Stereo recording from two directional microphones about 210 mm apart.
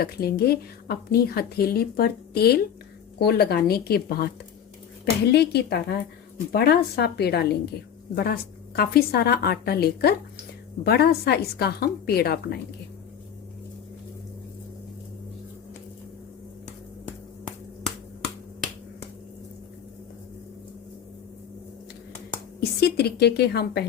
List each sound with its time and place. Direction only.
0.0 s a woman's voice: 50° left (ahead or behind)
22.8 s a woman's voice: 50° left (ahead or behind)